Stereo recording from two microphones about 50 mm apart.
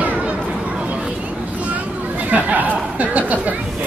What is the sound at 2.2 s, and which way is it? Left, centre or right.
Chatter, right.